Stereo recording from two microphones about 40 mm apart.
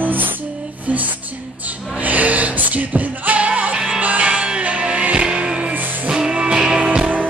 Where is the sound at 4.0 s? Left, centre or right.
Right.